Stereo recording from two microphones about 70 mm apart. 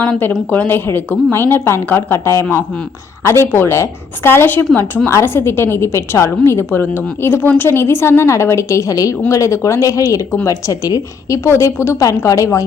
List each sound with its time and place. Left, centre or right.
0.0 s a woman's voice: left
11.4 s a woman's voice: left